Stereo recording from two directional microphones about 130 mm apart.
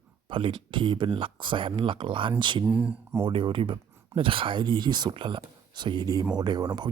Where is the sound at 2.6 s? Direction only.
10° right (ahead or behind).